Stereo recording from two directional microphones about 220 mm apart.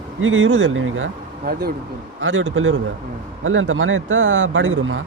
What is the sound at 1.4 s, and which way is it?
Speech, 45° right (ahead or behind).